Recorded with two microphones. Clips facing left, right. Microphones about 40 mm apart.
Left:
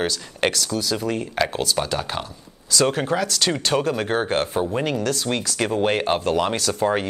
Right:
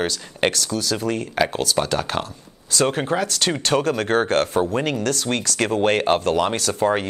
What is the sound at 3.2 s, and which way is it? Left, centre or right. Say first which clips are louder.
Speech: even; right.